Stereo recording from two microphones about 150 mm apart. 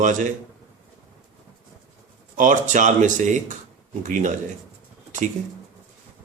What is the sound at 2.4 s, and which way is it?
Speech, 55° right (ahead or behind).